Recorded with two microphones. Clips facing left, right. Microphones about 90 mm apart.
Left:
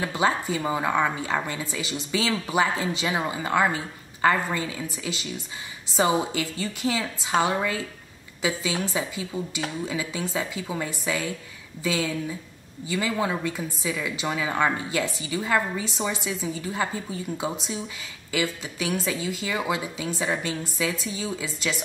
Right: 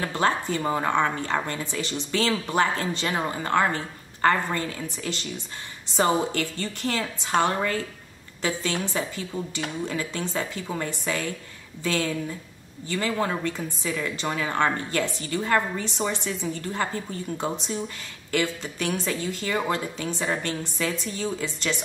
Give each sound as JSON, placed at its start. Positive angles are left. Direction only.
{"t": 0.0, "sound": "a woman's voice", "side_deg": 5}